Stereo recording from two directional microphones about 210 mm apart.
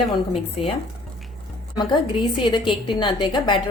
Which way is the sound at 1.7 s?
20° left (ahead or behind).